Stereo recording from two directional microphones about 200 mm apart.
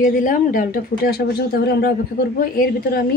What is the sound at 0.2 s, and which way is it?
A woman's voice, 45° left (ahead or behind).